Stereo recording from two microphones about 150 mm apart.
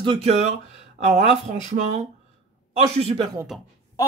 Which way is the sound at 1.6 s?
50° right (ahead or behind).